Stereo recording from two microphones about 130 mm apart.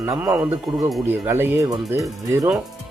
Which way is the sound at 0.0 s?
15° right (ahead or behind).